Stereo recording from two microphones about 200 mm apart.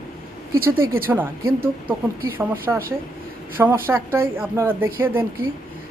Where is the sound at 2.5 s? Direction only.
15° right (ahead or behind).